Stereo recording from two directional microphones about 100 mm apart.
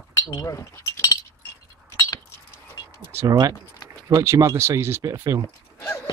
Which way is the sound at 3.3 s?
40° right (ahead or behind).